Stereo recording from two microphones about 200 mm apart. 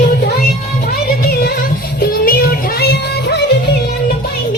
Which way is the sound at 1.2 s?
50° left (ahead or behind).